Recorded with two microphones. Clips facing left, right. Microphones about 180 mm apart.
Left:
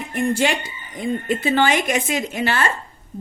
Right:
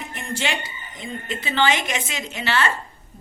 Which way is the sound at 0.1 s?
55° left (ahead or behind).